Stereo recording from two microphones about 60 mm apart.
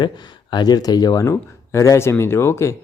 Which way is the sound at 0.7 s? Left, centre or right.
Left.